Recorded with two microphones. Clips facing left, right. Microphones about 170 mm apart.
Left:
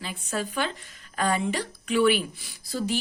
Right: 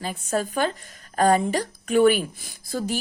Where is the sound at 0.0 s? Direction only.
45° right (ahead or behind).